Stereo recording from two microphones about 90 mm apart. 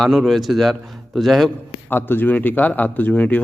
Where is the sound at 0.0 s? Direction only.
Centre (ahead or behind).